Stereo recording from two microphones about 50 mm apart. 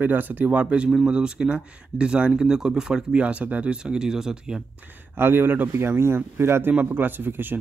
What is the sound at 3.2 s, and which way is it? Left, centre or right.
Speech, right.